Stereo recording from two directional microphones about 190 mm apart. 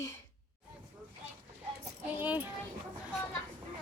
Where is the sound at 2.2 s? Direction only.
10° right (ahead or behind).